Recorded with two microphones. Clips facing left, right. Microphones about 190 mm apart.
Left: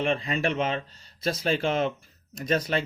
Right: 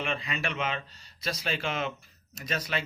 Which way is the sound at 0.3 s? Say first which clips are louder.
Left 6 dB; 45° left (ahead or behind).